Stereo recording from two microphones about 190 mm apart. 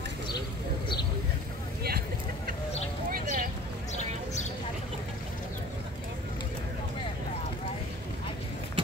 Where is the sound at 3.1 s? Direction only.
45° right (ahead or behind).